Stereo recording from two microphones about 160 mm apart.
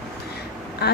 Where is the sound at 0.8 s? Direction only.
90° left.